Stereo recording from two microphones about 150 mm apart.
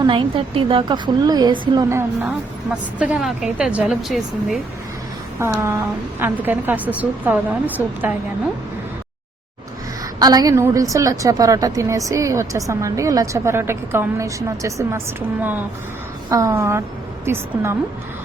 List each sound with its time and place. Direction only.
0.0 s a woman's voice: 35° right (ahead or behind)
2.2 s a woman's voice: 10° right (ahead or behind)
5.4 s a woman's voice: 15° right (ahead or behind)
10.2 s a woman's voice: 25° right (ahead or behind)